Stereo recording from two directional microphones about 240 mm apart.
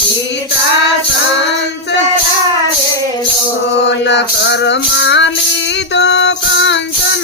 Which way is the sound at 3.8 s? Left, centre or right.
Left.